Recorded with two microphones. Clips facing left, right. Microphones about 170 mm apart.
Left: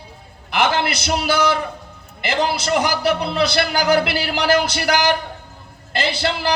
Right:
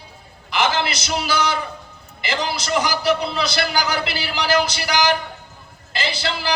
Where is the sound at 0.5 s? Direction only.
55° left (ahead or behind).